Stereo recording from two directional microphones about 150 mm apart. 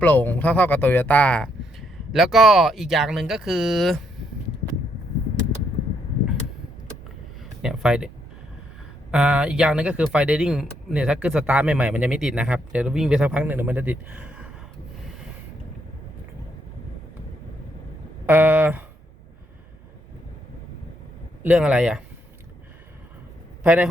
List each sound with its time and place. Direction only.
0.0 s speech: 10° left (ahead or behind)
7.6 s speech: 5° right (ahead or behind)
9.1 s speech: 5° right (ahead or behind)
18.3 s speech: 10° right (ahead or behind)
21.4 s speech: 10° right (ahead or behind)
23.6 s speech: 10° right (ahead or behind)